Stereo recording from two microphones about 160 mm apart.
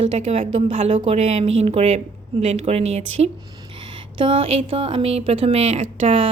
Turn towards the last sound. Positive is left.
turn(degrees=-35)  # may be behind; listen again after turning